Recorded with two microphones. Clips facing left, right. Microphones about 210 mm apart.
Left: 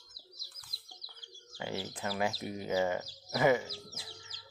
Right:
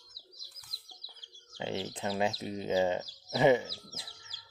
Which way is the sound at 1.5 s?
25° right (ahead or behind).